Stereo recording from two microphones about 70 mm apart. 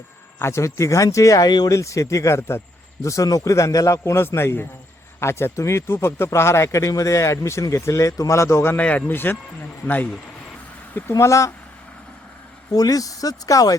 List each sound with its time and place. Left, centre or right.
0.3 s speech: left
1.5 s speech: left
1.7 s speech: left
8.8 s speech: left
11.2 s speech: left
12.7 s speech: left